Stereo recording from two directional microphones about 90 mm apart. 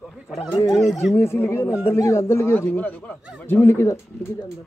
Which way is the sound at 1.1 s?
30° left (ahead or behind).